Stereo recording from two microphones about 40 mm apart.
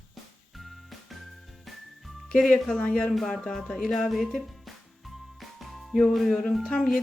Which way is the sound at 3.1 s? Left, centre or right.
Centre.